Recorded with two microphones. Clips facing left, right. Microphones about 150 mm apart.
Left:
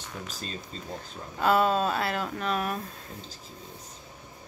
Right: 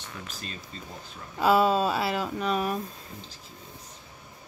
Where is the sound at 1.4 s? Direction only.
5° right (ahead or behind).